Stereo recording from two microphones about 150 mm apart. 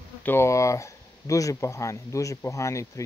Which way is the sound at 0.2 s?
15° left (ahead or behind).